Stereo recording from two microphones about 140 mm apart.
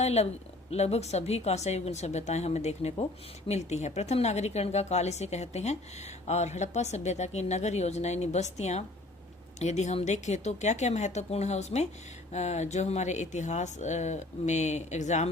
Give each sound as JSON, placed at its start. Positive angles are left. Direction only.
{"t": 0.0, "sound": "a woman's voice", "side_deg": 50}